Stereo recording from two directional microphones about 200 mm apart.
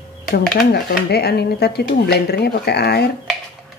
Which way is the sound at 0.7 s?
55° left (ahead or behind).